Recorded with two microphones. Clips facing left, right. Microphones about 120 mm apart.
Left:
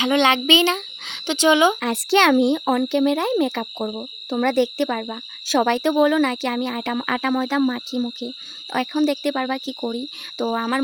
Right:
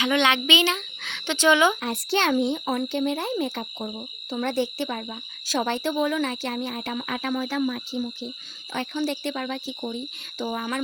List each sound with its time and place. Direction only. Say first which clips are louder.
0.0 s speech: left 4 dB; 30° left (ahead or behind)
1.1 s speech: left 3 dB; 15° left (ahead or behind)
1.8 s speech: left 7 dB; 90° left
8.7 s speech: left 7 dB; 65° left (ahead or behind)